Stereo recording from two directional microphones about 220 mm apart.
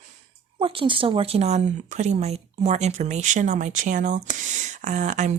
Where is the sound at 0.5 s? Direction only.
25° right (ahead or behind).